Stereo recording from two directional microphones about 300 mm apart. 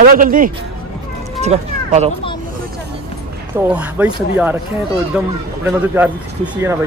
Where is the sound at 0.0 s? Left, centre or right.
Right.